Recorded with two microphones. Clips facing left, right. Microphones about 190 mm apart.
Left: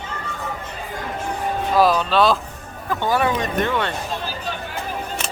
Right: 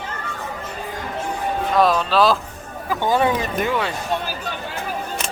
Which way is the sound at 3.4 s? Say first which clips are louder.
Even; 5° right (ahead or behind).